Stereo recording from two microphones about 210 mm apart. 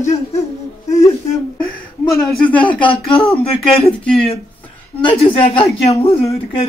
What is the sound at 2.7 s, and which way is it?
Speech, 25° left (ahead or behind).